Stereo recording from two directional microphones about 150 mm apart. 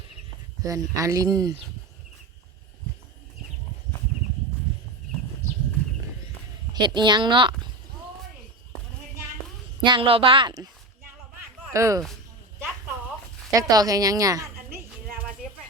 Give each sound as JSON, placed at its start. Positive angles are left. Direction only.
{"t": 0.6, "sound": "speech", "side_deg": -20}
{"t": 6.7, "sound": "speech", "side_deg": -30}
{"t": 9.8, "sound": "speech", "side_deg": -35}
{"t": 11.7, "sound": "speech", "side_deg": -20}
{"t": 13.5, "sound": "a woman's voice", "side_deg": -25}